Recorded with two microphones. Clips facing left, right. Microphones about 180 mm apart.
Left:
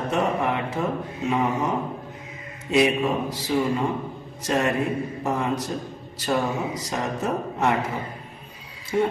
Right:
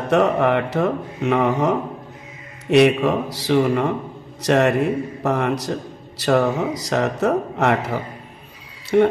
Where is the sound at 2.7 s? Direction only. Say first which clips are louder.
Right 6 dB; 75° right (ahead or behind).